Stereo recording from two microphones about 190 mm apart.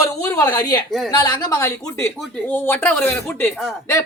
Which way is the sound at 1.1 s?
20° left (ahead or behind).